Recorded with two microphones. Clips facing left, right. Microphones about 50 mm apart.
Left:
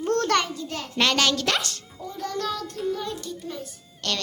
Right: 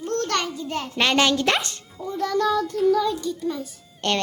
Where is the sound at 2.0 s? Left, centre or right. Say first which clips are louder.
Right 6 dB; centre.